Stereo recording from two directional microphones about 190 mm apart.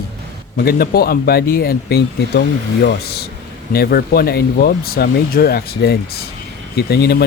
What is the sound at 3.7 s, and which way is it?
Speech, 55° left (ahead or behind).